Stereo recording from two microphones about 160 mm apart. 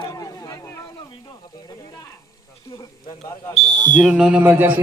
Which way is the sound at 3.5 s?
45° left (ahead or behind).